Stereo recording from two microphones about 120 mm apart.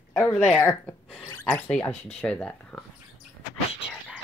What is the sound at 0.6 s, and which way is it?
Speech, 15° left (ahead or behind).